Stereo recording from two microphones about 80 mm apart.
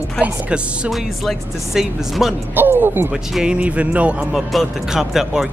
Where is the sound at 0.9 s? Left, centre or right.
Centre.